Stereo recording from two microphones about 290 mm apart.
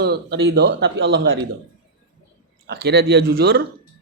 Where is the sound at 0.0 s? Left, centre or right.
Right.